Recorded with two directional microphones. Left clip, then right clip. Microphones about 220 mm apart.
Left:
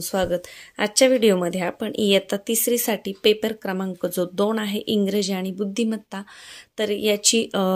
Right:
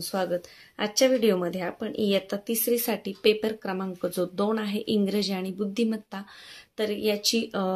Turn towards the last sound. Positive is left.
turn(degrees=35)  # may be behind; listen again after turning